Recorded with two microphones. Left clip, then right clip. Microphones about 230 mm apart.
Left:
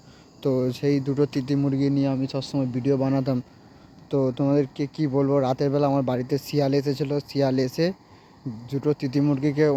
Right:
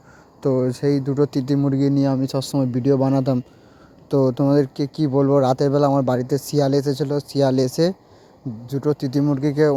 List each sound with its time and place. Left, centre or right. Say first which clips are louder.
0.4 s speech: right 4 dB; right